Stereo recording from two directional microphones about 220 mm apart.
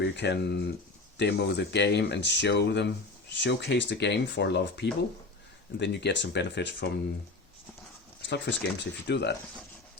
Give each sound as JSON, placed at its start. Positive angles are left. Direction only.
{"t": 0.0, "sound": "speech", "side_deg": 50}
{"t": 8.3, "sound": "speech", "side_deg": 50}